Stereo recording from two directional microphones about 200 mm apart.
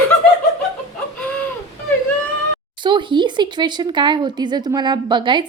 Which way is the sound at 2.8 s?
25° right (ahead or behind).